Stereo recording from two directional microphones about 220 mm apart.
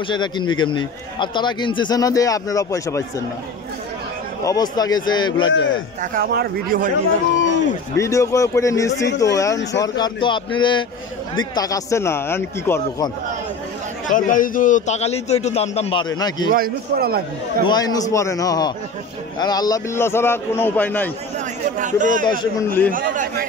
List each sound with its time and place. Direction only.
0.1 s a man's voice: 20° left (ahead or behind)
4.5 s a man's voice: 15° left (ahead or behind)
5.5 s a man's voice: 55° left (ahead or behind)
6.1 s speech: 40° right (ahead or behind)
7.3 s a sound: 55° left (ahead or behind)
8.0 s a man's voice: 15° left (ahead or behind)
14.0 s a man's voice: 35° left (ahead or behind); by 16.4 s 20° left (ahead or behind)
16.4 s a man's voice: 40° right (ahead or behind)
17.6 s a man's voice: 15° left (ahead or behind)
21.7 s speech: 35° right (ahead or behind)